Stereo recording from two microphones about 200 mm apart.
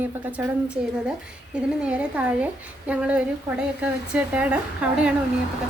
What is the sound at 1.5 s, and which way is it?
A woman's voice, 5° right (ahead or behind).